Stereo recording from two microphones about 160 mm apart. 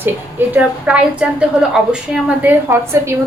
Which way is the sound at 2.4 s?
15° right (ahead or behind).